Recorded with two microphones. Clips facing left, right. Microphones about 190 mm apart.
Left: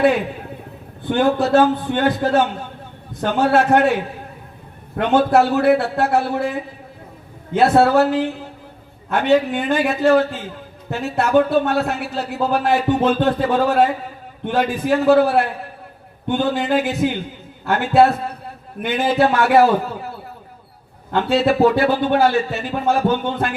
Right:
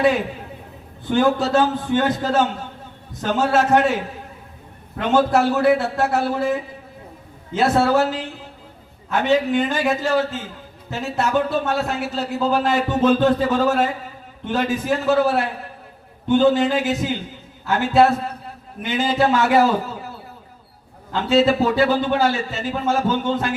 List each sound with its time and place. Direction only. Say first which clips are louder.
1.0 s a man's voice: left 1 dB; 60° left (ahead or behind)
4.9 s a man's voice: left 2 dB; 60° left (ahead or behind)
21.1 s a man's voice: even; 60° left (ahead or behind)